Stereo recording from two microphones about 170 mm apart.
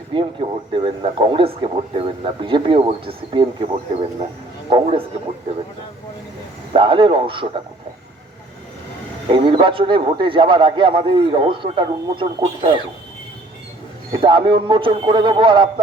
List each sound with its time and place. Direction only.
0.1 s speech: 30° right (ahead or behind)
4.7 s speech: 35° right (ahead or behind)
6.7 s speech: 30° right (ahead or behind)
9.3 s speech: 30° right (ahead or behind)
14.2 s a man's voice: 30° right (ahead or behind)